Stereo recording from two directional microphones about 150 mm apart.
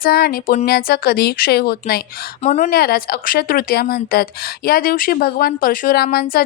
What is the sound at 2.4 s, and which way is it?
Speech, 60° left (ahead or behind).